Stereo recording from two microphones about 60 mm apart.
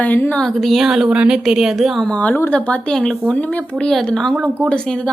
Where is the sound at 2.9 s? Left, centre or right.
Centre.